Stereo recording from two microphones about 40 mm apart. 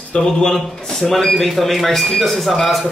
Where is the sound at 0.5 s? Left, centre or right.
Centre.